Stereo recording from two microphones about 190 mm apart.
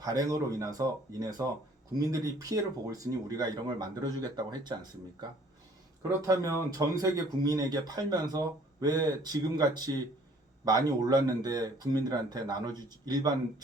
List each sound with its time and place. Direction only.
0.0 s speech: 20° right (ahead or behind)
6.0 s speech: 20° right (ahead or behind)